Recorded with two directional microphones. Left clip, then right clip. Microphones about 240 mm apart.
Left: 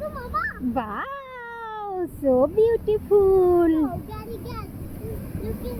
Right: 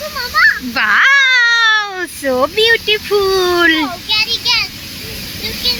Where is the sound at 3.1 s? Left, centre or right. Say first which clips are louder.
Right 2 dB; centre.